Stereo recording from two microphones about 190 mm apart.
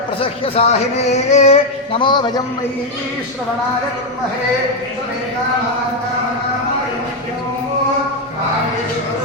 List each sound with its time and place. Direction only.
0.2 s speech: 30° left (ahead or behind)